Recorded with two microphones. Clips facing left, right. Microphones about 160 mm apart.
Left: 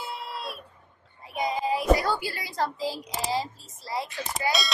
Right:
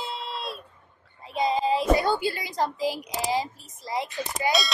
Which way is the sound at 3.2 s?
15° right (ahead or behind).